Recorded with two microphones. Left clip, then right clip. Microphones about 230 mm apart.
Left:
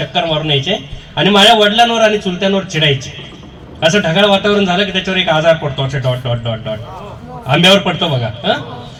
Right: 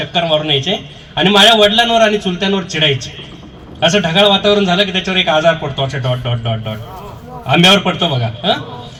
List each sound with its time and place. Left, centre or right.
0.0 s a man's voice: right